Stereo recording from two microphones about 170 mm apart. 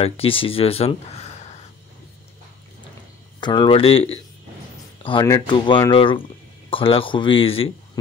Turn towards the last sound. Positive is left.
turn(degrees=35)  # may be behind; listen again after turning